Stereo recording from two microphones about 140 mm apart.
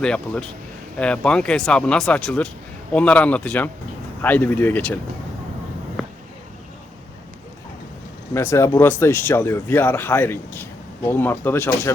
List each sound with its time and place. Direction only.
0.0 s speech: 5° left (ahead or behind)
6.0 s a sound: 5° right (ahead or behind)
8.3 s speech: 20° left (ahead or behind)